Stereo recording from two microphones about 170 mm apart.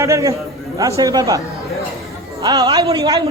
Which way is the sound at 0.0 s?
20° right (ahead or behind).